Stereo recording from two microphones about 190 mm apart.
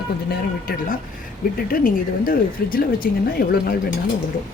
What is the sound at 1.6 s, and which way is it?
Speech, 50° left (ahead or behind).